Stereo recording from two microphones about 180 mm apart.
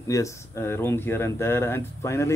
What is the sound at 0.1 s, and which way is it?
Speech, 15° left (ahead or behind).